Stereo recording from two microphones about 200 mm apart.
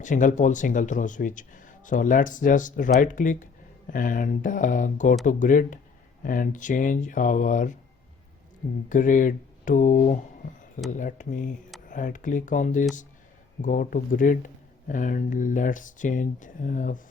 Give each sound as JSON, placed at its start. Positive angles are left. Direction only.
{"t": 0.0, "sound": "speech", "side_deg": 40}
{"t": 8.9, "sound": "speech", "side_deg": 40}